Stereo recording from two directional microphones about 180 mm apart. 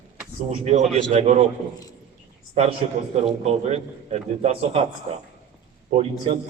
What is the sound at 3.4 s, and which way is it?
A man's voice, 35° right (ahead or behind).